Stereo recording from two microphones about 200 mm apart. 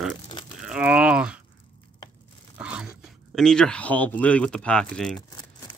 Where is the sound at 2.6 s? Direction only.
5° right (ahead or behind).